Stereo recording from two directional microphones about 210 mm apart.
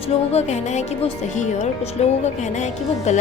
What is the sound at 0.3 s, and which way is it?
Speech, 30° left (ahead or behind).